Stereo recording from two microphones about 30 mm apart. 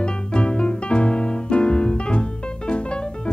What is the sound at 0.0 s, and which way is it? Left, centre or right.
Music, left.